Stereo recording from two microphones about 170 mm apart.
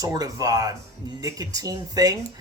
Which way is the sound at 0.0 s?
20° right (ahead or behind).